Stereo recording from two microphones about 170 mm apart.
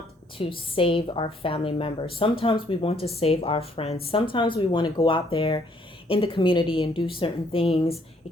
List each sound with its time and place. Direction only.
0.3 s speech: 30° left (ahead or behind)